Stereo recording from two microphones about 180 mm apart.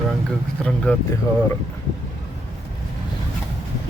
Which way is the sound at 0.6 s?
5° left (ahead or behind).